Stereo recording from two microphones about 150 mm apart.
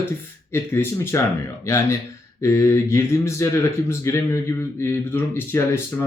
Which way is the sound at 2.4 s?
20° left (ahead or behind).